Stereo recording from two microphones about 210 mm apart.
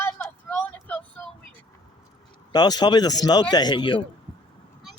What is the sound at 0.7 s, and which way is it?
Vehicle, 10° left (ahead or behind).